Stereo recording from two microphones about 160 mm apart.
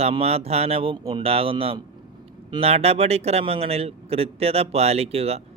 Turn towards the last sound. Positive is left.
turn(degrees=-40)  # may be behind; listen again after turning